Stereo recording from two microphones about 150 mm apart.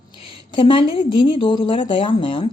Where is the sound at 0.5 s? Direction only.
35° left (ahead or behind).